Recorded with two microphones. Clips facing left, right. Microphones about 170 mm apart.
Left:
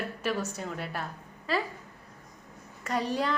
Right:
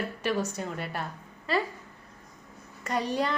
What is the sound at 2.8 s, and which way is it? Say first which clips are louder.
Speech: right 1 dB; 5° left (ahead or behind).